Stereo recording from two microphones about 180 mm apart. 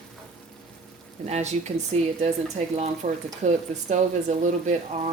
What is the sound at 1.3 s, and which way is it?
Speech, 40° right (ahead or behind).